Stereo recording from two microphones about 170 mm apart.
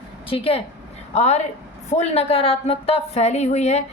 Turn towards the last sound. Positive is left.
turn(degrees=40)  # may be behind; listen again after turning